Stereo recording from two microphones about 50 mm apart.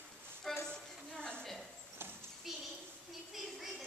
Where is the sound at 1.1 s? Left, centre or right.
Centre.